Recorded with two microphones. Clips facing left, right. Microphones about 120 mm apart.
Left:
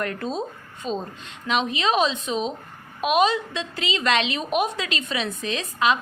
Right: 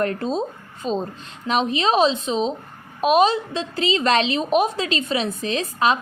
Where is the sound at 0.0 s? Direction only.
35° right (ahead or behind).